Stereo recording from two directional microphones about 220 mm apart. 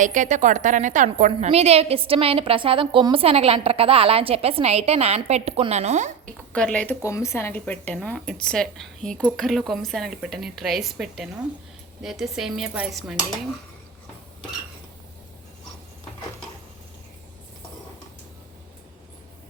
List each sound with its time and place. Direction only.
0.0 s a woman's voice: 35° right (ahead or behind)
6.5 s speech: 5° left (ahead or behind)